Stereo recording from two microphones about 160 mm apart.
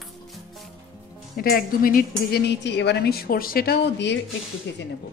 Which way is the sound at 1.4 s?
65° left (ahead or behind).